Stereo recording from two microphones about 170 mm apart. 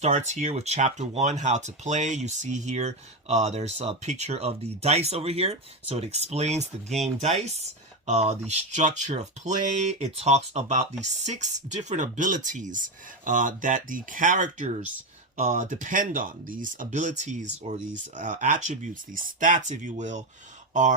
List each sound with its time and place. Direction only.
0.0 s speech: 45° right (ahead or behind)